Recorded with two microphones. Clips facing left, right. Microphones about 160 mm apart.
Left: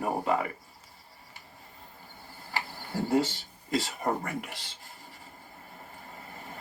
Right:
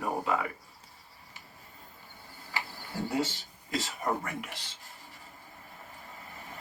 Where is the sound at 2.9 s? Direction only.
50° left (ahead or behind).